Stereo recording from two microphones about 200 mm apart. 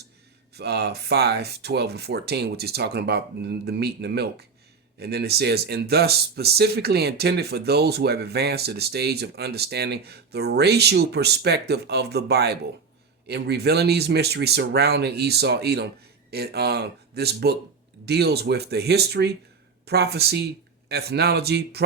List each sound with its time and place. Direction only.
0.5 s speech: 55° right (ahead or behind)